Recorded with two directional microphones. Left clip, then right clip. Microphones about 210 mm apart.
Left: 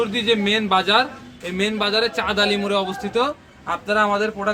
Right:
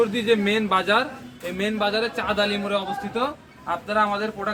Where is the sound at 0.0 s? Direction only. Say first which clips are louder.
Left 1 dB; 20° left (ahead or behind).